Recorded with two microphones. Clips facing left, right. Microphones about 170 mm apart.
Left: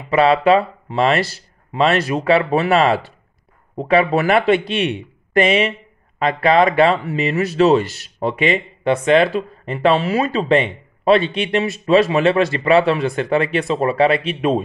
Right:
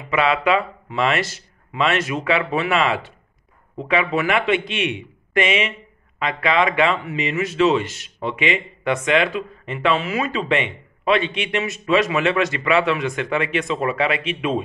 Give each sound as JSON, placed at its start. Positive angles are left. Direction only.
{"t": 0.1, "sound": "speech", "side_deg": 35}